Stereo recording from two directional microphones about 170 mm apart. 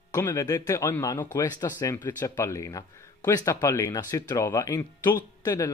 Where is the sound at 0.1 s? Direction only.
20° left (ahead or behind).